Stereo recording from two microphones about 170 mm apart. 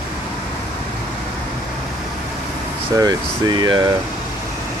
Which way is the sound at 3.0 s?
25° right (ahead or behind).